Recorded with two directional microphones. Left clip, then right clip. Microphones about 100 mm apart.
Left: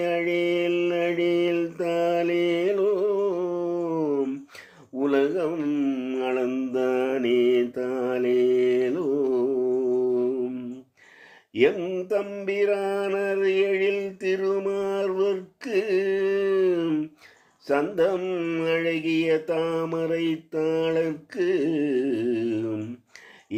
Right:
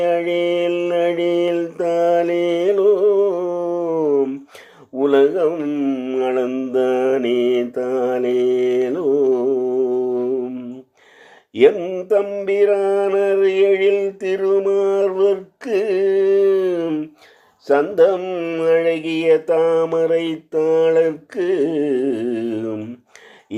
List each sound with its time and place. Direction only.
0.0 s mantra: 40° right (ahead or behind)
11.5 s mantra: 35° right (ahead or behind)